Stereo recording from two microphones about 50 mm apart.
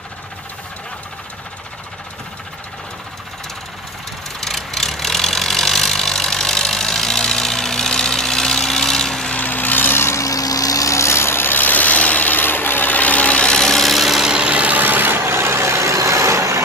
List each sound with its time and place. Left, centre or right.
4.4 s vehicle: centre
9.3 s a sound: left
10.0 s vehicle: left
10.9 s vehicle: left; by 14.2 s centre
14.2 s vehicle: centre; by 15.2 s right
15.2 s vehicle: right